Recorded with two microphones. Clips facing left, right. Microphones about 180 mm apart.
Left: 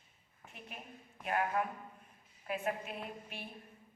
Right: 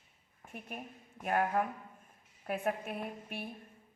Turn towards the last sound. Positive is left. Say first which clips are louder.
# right 4 dB
turn(degrees=-50)  # may be behind; listen again after turning